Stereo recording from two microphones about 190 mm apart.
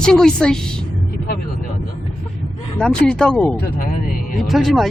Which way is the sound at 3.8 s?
45° left (ahead or behind).